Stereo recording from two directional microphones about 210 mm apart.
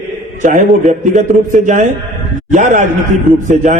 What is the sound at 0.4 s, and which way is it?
Speech, 35° right (ahead or behind).